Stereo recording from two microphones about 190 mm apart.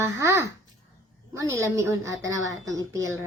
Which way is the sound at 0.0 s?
15° right (ahead or behind).